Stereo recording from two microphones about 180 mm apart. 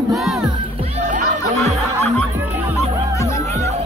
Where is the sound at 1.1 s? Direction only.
40° right (ahead or behind).